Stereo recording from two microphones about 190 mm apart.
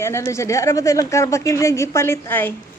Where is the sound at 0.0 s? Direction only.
15° left (ahead or behind).